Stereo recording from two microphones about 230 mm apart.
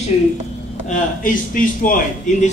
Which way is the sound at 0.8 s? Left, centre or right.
Left.